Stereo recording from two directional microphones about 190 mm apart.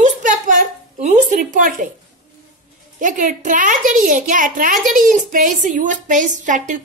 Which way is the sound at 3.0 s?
45° right (ahead or behind).